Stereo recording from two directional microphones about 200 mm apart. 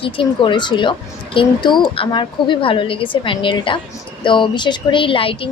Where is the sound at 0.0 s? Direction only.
25° left (ahead or behind).